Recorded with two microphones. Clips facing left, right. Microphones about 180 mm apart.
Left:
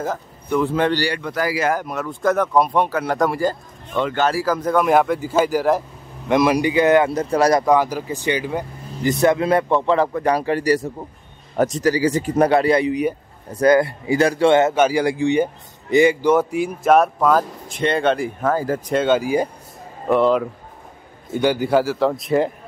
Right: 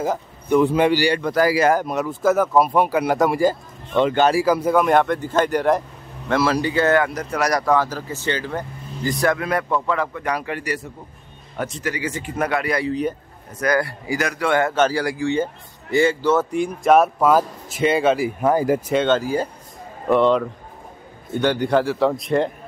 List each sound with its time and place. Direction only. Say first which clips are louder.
0.0 s speech: right 2 dB; 15° right (ahead or behind)
1.2 s speech: right 4 dB; 40° right (ahead or behind)
2.0 s speech: even; 5° right (ahead or behind)
3.9 s speech: right 3 dB; 20° right (ahead or behind)
4.8 s speech: left 1 dB; 5° left (ahead or behind)
6.2 s speech: left 3 dB; 15° left (ahead or behind)
7.1 s a man's voice: left 5 dB; 30° left (ahead or behind)
7.6 s speech: left 3 dB; 15° left (ahead or behind)
9.2 s a man's voice: left 5 dB; 25° left (ahead or behind)
14.8 s speech: left 3 dB; 10° left (ahead or behind); by 18.8 s 15° right (ahead or behind)
19.0 s speech: left 2 dB; 10° left (ahead or behind)
20.1 s speech: even; 5° left (ahead or behind)